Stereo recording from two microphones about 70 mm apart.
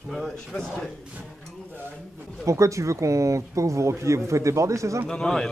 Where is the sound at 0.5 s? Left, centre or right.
Left.